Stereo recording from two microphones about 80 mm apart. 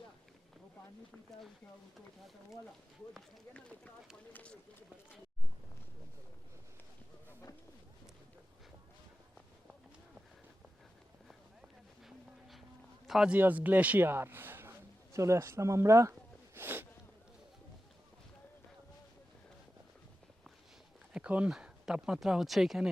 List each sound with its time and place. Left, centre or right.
3.5 s speech: centre
12.0 s a sound: centre
13.1 s speech: centre
13.3 s a man's voice: right
16.6 s speech: right
21.1 s speech: centre